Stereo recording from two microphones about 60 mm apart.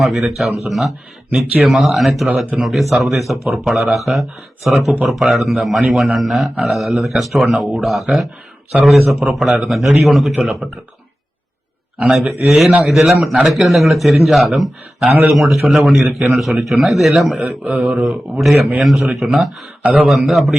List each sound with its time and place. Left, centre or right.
0.0 s a man's voice: centre
12.1 s a man's voice: centre
17.4 s speech: right
18.3 s a man's voice: centre